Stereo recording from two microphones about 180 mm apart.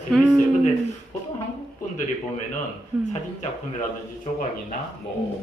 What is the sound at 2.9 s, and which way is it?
Speech, 10° right (ahead or behind).